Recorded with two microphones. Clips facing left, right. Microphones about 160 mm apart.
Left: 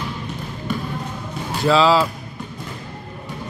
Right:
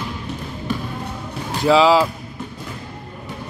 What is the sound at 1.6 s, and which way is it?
Speech, 15° right (ahead or behind).